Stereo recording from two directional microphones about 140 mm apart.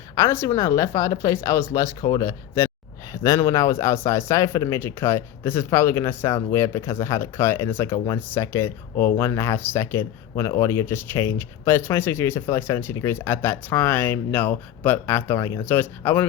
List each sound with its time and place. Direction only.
0.2 s speech: 20° left (ahead or behind)